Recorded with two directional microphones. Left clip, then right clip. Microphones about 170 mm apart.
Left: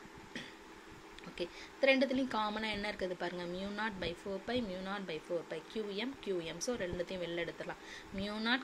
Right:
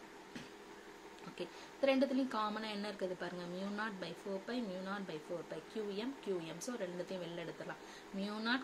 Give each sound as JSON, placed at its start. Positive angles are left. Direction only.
{"t": 1.4, "sound": "a woman's voice", "side_deg": 30}